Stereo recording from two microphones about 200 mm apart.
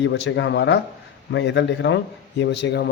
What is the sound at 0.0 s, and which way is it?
A man's voice, 65° left (ahead or behind).